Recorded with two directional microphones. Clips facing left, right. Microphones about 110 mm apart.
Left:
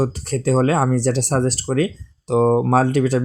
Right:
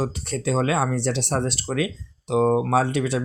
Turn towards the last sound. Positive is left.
turn(degrees=45)  # may be behind; listen again after turning